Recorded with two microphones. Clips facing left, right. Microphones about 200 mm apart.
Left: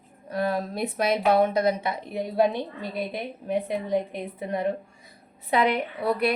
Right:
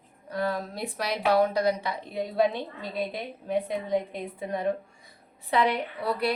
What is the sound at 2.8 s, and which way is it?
A woman's voice, 60° left (ahead or behind).